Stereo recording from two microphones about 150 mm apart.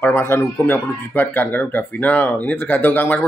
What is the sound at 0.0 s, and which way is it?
Speech, 15° left (ahead or behind).